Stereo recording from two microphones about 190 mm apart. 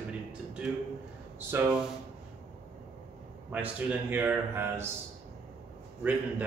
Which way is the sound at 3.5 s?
10° right (ahead or behind).